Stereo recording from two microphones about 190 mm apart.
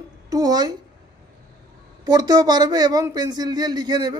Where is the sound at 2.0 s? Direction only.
20° right (ahead or behind).